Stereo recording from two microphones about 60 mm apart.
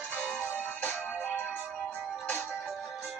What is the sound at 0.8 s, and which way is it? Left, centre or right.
Music, left.